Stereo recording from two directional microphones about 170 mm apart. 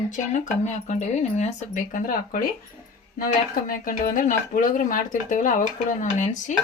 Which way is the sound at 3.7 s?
55° left (ahead or behind).